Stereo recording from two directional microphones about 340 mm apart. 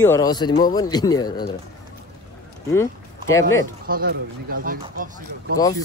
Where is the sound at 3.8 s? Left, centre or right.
Right.